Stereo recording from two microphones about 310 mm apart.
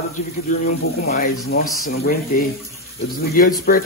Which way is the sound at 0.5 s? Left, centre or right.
Left.